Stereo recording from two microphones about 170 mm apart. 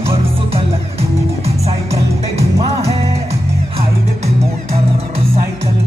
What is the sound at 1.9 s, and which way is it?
Music, 15° right (ahead or behind).